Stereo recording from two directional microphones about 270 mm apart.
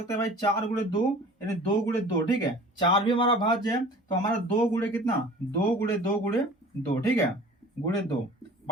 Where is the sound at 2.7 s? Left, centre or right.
Centre.